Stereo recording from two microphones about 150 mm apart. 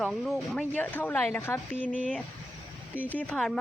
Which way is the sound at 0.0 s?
Centre (ahead or behind).